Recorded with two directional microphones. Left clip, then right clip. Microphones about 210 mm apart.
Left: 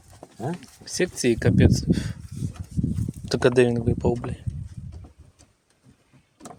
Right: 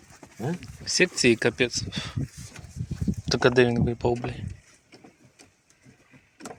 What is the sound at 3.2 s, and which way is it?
Speech, 25° left (ahead or behind).